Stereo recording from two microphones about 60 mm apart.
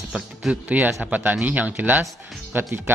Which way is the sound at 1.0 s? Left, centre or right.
Right.